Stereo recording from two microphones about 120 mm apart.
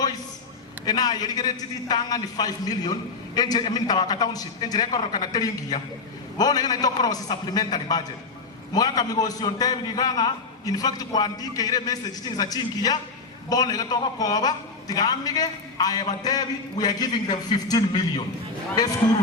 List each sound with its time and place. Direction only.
0.9 s a man's voice: 35° left (ahead or behind)